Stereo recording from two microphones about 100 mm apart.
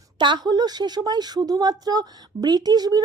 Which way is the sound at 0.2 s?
45° right (ahead or behind).